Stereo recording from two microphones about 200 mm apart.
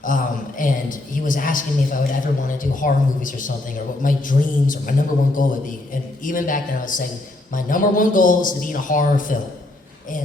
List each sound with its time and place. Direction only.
0.0 s a man's voice: 40° left (ahead or behind)